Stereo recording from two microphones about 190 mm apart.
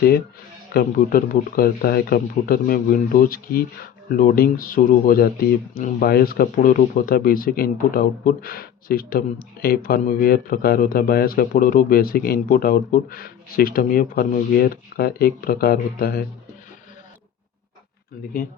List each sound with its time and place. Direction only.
0.7 s speech: 50° left (ahead or behind)